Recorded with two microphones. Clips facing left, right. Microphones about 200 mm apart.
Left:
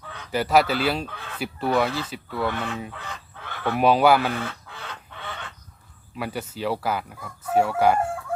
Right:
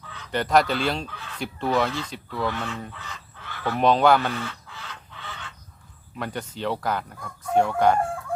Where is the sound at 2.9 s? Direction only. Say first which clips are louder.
Left 3 dB; 55° left (ahead or behind).